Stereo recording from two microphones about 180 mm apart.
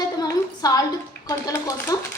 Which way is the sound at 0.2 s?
20° left (ahead or behind).